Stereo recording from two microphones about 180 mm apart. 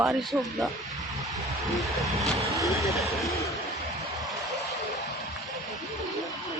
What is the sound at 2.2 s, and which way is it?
Vehicle, 15° right (ahead or behind).